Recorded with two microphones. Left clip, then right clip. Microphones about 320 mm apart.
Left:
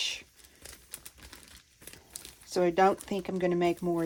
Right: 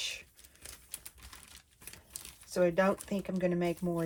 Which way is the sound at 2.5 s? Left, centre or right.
Left.